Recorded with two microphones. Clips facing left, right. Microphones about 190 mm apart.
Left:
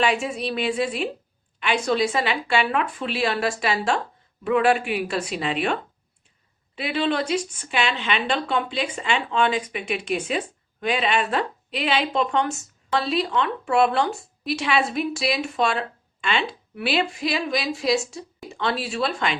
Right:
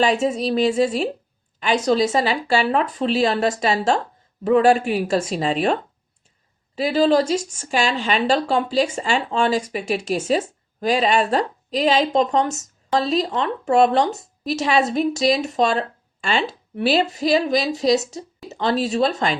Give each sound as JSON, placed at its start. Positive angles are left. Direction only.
{"t": 0.0, "sound": "a woman's voice", "side_deg": -40}